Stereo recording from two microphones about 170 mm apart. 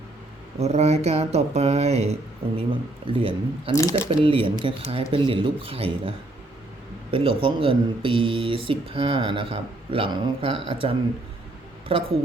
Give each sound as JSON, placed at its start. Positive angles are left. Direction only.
{"t": 0.6, "sound": "speech", "side_deg": -40}
{"t": 3.7, "sound": "speech", "side_deg": 20}
{"t": 4.1, "sound": "speech", "side_deg": -30}